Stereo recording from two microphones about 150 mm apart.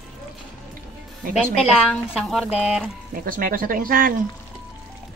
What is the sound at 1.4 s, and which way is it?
Speech, centre (ahead or behind).